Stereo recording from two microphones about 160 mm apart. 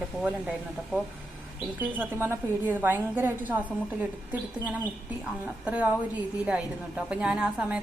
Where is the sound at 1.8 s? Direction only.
10° right (ahead or behind).